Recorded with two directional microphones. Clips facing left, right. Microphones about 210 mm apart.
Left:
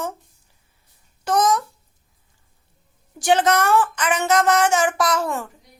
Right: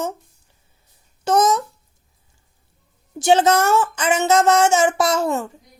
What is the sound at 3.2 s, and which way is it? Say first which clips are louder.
Speech: right 3 dB; 25° right (ahead or behind).